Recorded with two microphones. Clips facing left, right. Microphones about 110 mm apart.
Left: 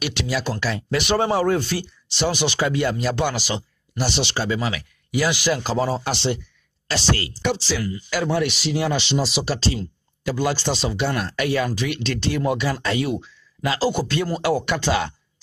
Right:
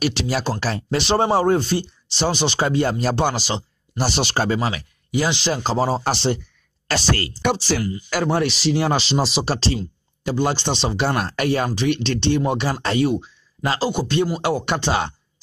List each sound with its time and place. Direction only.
0.0 s speech: 35° right (ahead or behind)
4.1 s speech: 45° right (ahead or behind); by 10.8 s 25° right (ahead or behind)
10.9 s speech: 40° right (ahead or behind)
13.7 s speech: 20° right (ahead or behind)